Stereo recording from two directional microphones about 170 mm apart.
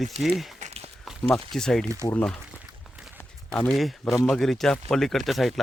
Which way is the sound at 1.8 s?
15° right (ahead or behind).